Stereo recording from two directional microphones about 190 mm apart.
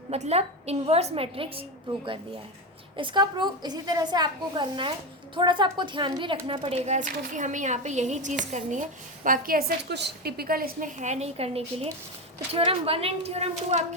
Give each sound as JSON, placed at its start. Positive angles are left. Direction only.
{"t": 0.1, "sound": "a woman's voice", "side_deg": -35}
{"t": 3.0, "sound": "a woman's voice", "side_deg": -25}